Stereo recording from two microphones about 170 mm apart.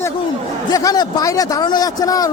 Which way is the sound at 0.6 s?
20° left (ahead or behind).